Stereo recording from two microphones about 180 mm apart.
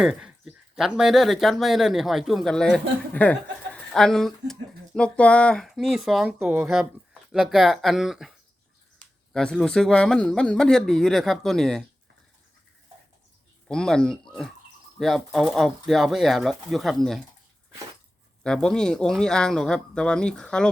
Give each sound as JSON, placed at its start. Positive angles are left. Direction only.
{"t": 0.0, "sound": "speech", "side_deg": -5}
{"t": 6.4, "sound": "speech", "side_deg": -15}
{"t": 6.7, "sound": "speech", "side_deg": 0}
{"t": 13.7, "sound": "speech", "side_deg": 5}
{"t": 18.4, "sound": "speech", "side_deg": 5}